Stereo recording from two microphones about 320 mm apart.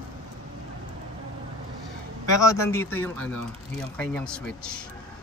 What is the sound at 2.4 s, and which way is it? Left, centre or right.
Speech, centre.